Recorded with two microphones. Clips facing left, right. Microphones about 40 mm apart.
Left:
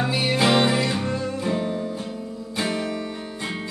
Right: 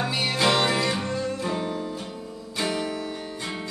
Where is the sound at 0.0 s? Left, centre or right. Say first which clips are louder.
Left 2 dB; centre.